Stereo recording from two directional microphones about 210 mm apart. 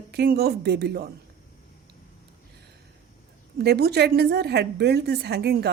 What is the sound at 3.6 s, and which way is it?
A woman's voice, 50° right (ahead or behind).